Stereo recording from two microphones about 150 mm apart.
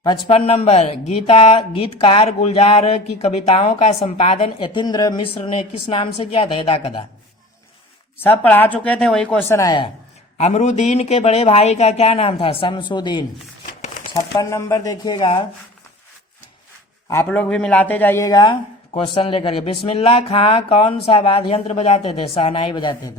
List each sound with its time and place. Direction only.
0.3 s a woman's voice: 45° left (ahead or behind)
8.2 s speech: 15° left (ahead or behind)
9.5 s speech: 20° left (ahead or behind)
10.3 s a woman's voice: 50° left (ahead or behind)
17.2 s speech: 10° left (ahead or behind); by 18.5 s 25° left (ahead or behind)
18.9 s speech: 40° left (ahead or behind)
22.7 s speech: 30° left (ahead or behind)